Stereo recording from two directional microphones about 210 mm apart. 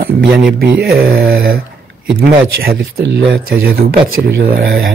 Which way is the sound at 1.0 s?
45° right (ahead or behind).